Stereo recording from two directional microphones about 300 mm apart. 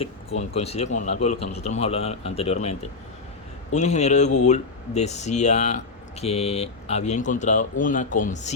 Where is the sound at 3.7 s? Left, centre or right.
Left.